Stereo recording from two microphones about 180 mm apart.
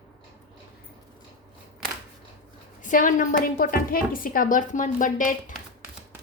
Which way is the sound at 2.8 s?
45° left (ahead or behind).